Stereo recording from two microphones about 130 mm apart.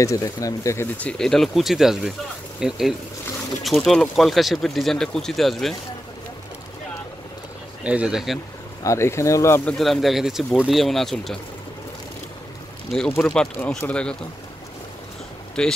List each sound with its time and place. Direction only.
0.0 s speech: 25° left (ahead or behind)
0.9 s speech: 5° left (ahead or behind)
7.8 s speech: 10° right (ahead or behind)
8.8 s speech: 20° left (ahead or behind)
9.7 s speech: centre (ahead or behind)
13.2 s speech: 5° left (ahead or behind)
15.6 s speech: 5° left (ahead or behind)